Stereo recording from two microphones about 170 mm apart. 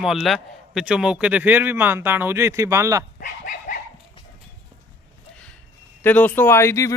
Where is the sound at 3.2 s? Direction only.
50° left (ahead or behind).